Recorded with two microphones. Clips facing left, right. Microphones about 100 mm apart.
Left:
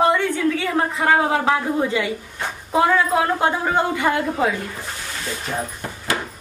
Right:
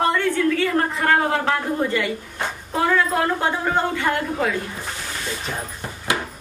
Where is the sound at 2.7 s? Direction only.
10° left (ahead or behind).